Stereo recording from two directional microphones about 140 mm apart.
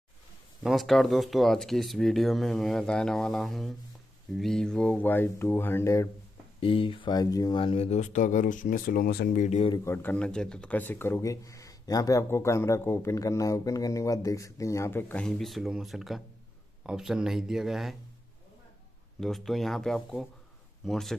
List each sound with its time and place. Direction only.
0.7 s speech: centre (ahead or behind); by 6.0 s 20° left (ahead or behind)
6.6 s speech: 40° left (ahead or behind)
7.6 s speech: 45° left (ahead or behind); by 9.5 s 85° left
9.5 s speech: 45° left (ahead or behind)
9.8 s speech: 15° left (ahead or behind)
15.2 s speech: centre (ahead or behind)
19.1 s speech: centre (ahead or behind)